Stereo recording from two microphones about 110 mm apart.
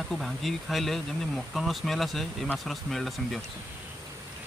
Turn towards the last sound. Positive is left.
turn(degrees=0)  # may be behind; listen again after turning